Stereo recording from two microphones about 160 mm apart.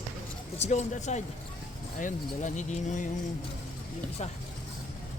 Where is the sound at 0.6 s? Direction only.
45° left (ahead or behind).